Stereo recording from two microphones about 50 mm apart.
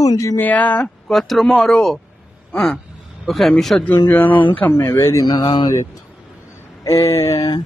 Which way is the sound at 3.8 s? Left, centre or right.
Left.